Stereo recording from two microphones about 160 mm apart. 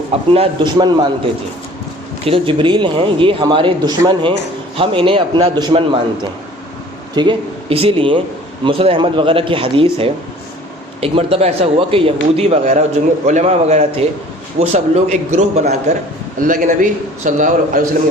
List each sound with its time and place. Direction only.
0.3 s a man's voice: 30° right (ahead or behind)
7.2 s a man's voice: 35° right (ahead or behind)
16.4 s a man's voice: 55° right (ahead or behind)